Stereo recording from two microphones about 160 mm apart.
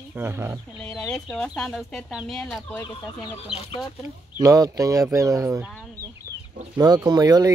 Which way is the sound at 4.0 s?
20° right (ahead or behind).